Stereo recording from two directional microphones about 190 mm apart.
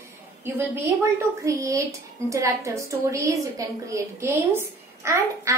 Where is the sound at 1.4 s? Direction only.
15° right (ahead or behind).